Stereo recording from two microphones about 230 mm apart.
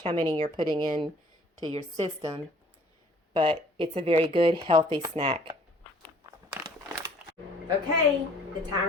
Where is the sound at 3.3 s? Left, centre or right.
Right.